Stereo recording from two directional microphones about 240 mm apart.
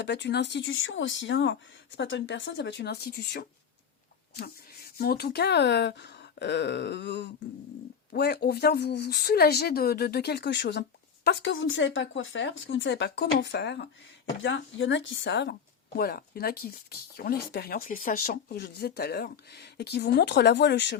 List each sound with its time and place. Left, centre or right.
0.0 s speech: left
4.9 s speech: left